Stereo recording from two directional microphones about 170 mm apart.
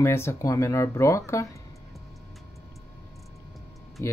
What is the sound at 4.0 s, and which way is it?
Speech, 15° left (ahead or behind).